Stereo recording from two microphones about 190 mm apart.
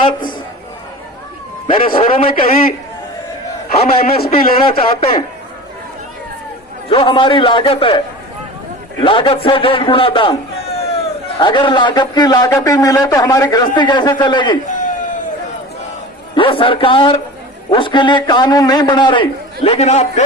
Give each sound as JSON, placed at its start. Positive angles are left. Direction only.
{"t": 1.7, "sound": "a man's voice", "side_deg": 30}
{"t": 2.5, "sound": "a man's voice", "side_deg": 50}
{"t": 3.8, "sound": "a man's voice", "side_deg": 30}
{"t": 4.2, "sound": "a man's voice", "side_deg": 50}
{"t": 4.6, "sound": "a man's voice", "side_deg": 30}
{"t": 6.8, "sound": "a man's voice", "side_deg": 25}
{"t": 14.7, "sound": "a sound", "side_deg": 40}
{"t": 16.3, "sound": "a man's voice", "side_deg": 25}